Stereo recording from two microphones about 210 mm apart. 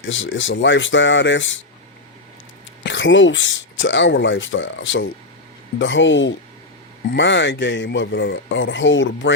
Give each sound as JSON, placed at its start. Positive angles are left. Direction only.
{"t": 0.0, "sound": "speech", "side_deg": 65}
{"t": 2.8, "sound": "speech", "side_deg": 60}